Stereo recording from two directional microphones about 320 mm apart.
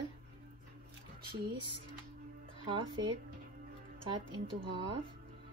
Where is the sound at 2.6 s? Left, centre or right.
Centre.